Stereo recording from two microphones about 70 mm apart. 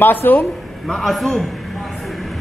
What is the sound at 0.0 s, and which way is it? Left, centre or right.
Speech, left.